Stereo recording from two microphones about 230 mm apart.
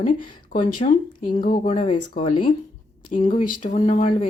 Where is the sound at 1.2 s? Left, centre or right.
Left.